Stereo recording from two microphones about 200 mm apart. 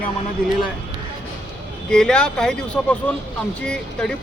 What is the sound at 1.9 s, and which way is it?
Speech, 5° left (ahead or behind).